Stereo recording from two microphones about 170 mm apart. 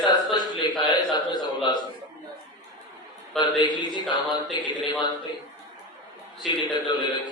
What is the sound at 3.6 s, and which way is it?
A man's voice, 25° left (ahead or behind).